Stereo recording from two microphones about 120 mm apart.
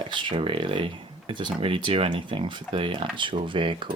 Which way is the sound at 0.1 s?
45° right (ahead or behind).